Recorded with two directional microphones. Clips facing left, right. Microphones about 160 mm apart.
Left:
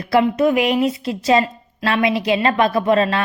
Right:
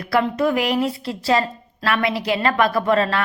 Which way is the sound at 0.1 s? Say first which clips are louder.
Left 4 dB; 20° left (ahead or behind).